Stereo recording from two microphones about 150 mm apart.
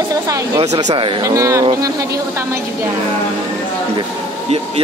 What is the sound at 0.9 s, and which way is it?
Speech, 25° right (ahead or behind).